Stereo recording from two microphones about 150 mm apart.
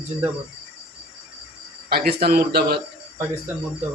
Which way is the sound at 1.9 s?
90° right.